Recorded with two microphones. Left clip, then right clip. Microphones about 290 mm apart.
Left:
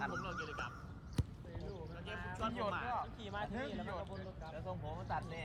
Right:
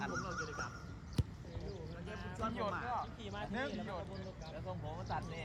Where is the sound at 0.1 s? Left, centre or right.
Left.